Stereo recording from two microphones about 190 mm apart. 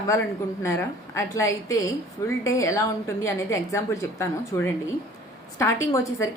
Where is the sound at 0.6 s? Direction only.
15° left (ahead or behind).